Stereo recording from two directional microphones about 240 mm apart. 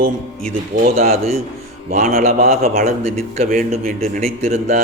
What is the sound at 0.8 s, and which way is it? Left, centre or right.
A man's voice, right.